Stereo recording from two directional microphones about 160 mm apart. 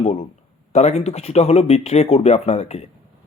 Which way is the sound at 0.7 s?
45° left (ahead or behind).